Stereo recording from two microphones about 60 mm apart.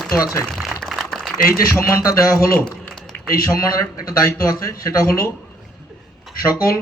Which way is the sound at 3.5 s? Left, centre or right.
Left.